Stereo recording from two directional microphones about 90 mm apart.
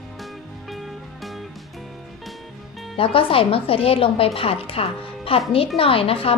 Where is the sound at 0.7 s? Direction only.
Centre (ahead or behind).